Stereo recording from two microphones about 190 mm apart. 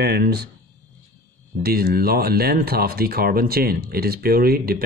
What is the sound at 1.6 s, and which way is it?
Speech, 55° right (ahead or behind).